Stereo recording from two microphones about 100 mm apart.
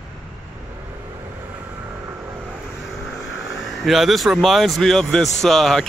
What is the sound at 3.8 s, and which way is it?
Speech, centre (ahead or behind).